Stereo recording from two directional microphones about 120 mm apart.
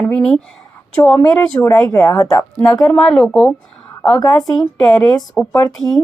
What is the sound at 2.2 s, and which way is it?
Speech, 30° left (ahead or behind).